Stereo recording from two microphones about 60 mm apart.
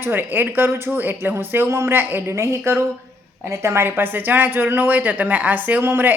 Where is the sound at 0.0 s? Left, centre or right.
Right.